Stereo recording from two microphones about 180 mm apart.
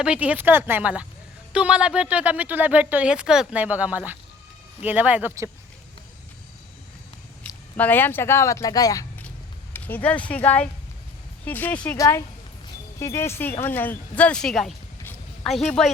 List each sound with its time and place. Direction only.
0.0 s speech: 5° right (ahead or behind)
7.4 s a sound: 10° left (ahead or behind)
7.8 s speech: 10° left (ahead or behind)